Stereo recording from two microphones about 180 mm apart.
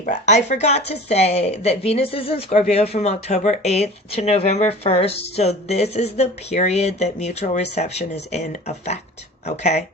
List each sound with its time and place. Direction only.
0.0 s speech: 40° left (ahead or behind)